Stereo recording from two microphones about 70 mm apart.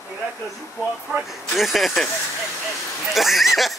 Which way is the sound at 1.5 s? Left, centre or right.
Centre.